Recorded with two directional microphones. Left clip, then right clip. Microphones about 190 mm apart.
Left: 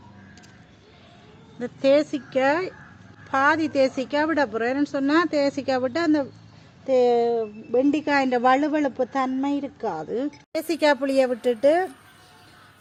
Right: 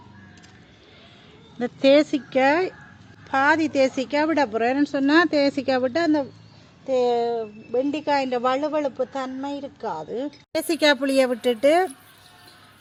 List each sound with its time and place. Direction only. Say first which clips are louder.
1.5 s speech: right 2 dB; 30° right (ahead or behind)
3.3 s speech: right 1 dB; 10° right (ahead or behind)
6.0 s speech: right 1 dB; 5° right (ahead or behind)
6.8 s a woman's voice: left 2 dB; 15° left (ahead or behind)
10.5 s speech: right 1 dB; 20° right (ahead or behind)